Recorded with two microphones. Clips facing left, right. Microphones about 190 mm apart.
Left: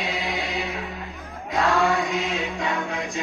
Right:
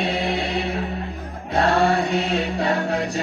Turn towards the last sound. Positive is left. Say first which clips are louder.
# right 6 dB
turn(degrees=-35)  # may be behind; listen again after turning